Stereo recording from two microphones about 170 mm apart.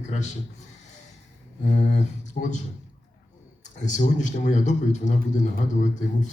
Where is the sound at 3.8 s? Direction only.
45° left (ahead or behind).